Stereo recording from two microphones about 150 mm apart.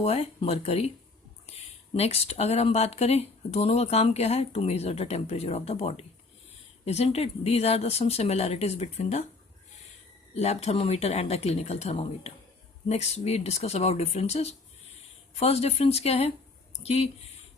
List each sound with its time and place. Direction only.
0.0 s speech: 40° left (ahead or behind)
10.3 s speech: 45° left (ahead or behind)